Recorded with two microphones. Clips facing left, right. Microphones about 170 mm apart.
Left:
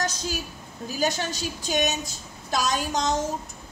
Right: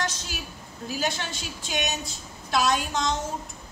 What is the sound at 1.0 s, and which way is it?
A woman's voice, 40° left (ahead or behind).